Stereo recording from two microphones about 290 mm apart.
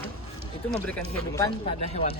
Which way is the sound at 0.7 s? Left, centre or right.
Centre.